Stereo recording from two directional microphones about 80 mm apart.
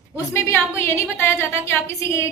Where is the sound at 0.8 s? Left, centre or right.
Left.